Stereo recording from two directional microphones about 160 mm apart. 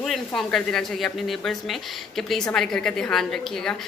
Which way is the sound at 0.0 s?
Centre (ahead or behind).